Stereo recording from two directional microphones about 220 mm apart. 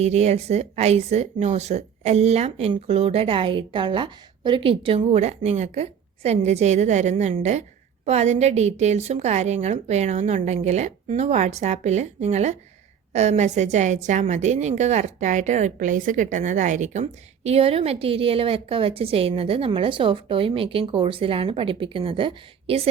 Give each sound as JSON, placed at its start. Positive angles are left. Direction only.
{"t": 0.0, "sound": "a woman's voice", "side_deg": -30}